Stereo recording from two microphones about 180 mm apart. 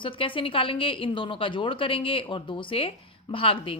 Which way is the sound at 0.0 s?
30° left (ahead or behind).